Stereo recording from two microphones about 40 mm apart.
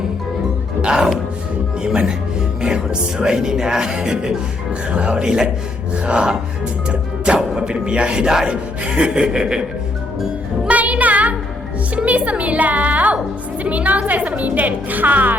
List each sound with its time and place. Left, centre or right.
0.8 s speech: centre
6.8 s music: right
7.3 s speech: centre
10.7 s music: right
11.9 s a woman's voice: right